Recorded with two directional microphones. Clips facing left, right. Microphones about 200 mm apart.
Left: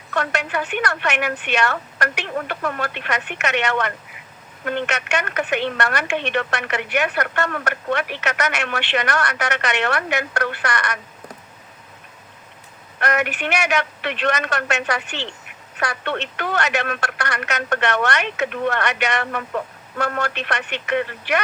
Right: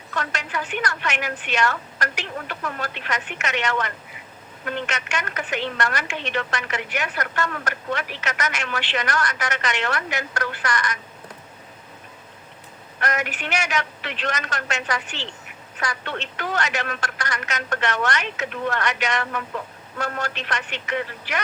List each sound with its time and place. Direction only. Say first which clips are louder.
0.1 s a woman's voice: left 6 dB; 60° left (ahead or behind)
13.0 s a woman's voice: left 5 dB; 65° left (ahead or behind)